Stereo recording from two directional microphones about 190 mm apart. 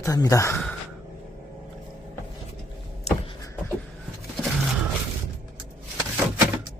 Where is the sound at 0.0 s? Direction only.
15° left (ahead or behind).